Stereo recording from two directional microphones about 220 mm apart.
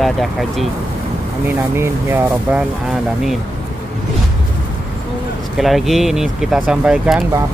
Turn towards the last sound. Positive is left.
turn(degrees=-5)  # may be behind; listen again after turning